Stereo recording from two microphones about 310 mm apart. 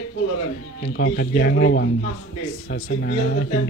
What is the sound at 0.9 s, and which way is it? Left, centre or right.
Speech, left.